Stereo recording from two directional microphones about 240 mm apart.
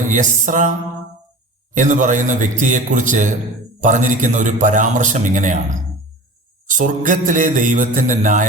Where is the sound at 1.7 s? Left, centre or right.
Right.